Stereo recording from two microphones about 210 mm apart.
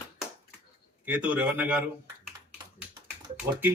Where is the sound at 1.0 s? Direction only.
5° right (ahead or behind).